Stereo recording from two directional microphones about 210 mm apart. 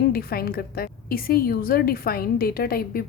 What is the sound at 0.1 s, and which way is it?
A woman's voice, 45° left (ahead or behind).